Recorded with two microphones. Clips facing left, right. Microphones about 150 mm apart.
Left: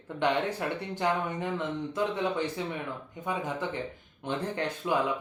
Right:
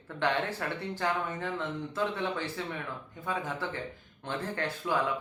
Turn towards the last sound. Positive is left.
turn(degrees=20)  # may be behind; listen again after turning